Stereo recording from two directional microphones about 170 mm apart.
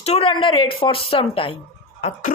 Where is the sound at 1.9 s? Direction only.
40° left (ahead or behind).